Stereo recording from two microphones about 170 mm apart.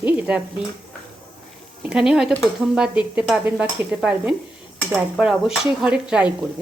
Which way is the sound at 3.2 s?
10° right (ahead or behind).